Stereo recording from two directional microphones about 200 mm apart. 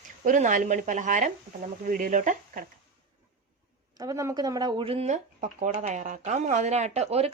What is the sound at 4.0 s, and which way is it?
Speech, 15° right (ahead or behind).